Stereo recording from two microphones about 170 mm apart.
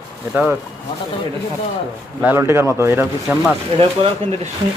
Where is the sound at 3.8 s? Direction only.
35° right (ahead or behind).